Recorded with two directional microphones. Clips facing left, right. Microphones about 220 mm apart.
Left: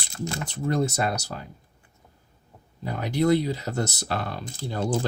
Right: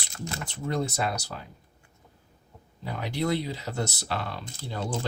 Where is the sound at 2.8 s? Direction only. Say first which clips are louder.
Left 6 dB; 45° left (ahead or behind).